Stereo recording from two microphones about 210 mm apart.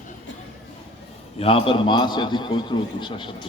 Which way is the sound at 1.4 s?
25° left (ahead or behind).